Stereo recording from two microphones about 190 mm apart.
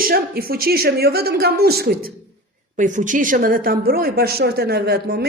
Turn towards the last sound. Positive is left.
turn(degrees=-55)  # may be behind; listen again after turning